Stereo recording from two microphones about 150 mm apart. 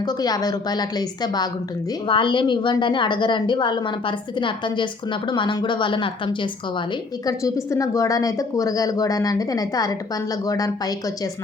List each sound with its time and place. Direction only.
0.0 s a woman's voice: 25° left (ahead or behind)
7.3 s speech: 20° left (ahead or behind)